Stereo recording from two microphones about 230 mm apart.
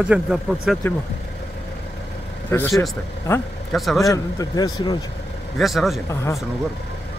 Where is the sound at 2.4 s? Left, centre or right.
Centre.